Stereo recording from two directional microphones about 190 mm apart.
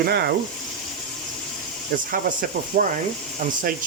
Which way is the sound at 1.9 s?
50° right (ahead or behind).